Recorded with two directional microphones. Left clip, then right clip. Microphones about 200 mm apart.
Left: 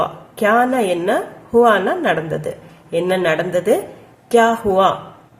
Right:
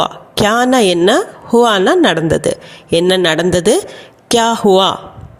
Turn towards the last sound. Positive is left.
turn(degrees=-45)  # may be behind; listen again after turning